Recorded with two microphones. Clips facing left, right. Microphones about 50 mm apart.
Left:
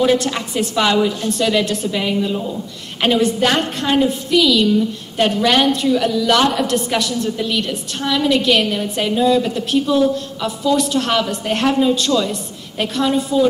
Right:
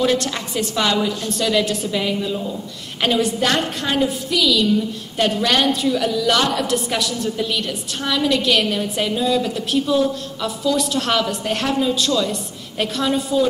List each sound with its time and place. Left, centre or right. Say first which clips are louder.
0.0 s a woman's voice: left 3 dB; centre
6.4 s a woman's voice: left 4 dB; centre
6.7 s a woman's voice: left 3 dB; centre